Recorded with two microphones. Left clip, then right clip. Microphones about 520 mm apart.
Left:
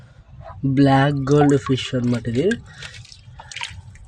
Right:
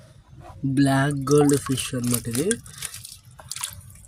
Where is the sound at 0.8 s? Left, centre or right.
Right.